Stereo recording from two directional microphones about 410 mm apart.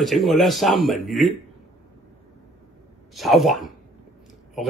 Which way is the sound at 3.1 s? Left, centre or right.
Centre.